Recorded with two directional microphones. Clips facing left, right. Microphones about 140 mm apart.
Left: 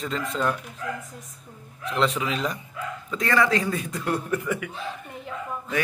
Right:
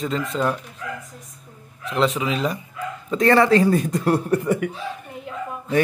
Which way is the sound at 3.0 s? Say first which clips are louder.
Right 7 dB; 30° right (ahead or behind).